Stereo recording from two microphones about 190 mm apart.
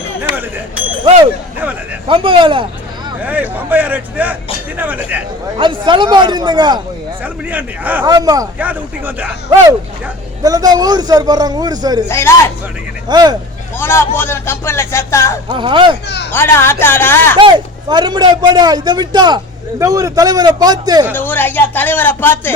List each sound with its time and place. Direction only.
1.0 s speech: 30° right (ahead or behind)
3.2 s speech: 10° right (ahead or behind)
5.5 s speech: 25° right (ahead or behind)
7.5 s speech: 10° right (ahead or behind)
8.0 s speech: 20° right (ahead or behind)
8.5 s speech: 10° right (ahead or behind)
12.0 s speech: 10° left (ahead or behind)
13.1 s speech: 20° right (ahead or behind)
13.7 s speech: 10° left (ahead or behind)
15.4 s speech: 25° right (ahead or behind)
16.0 s a child's voice: 60° left (ahead or behind)
16.3 s speech: 10° left (ahead or behind)
17.3 s speech: 25° right (ahead or behind)
21.1 s speech: 10° left (ahead or behind)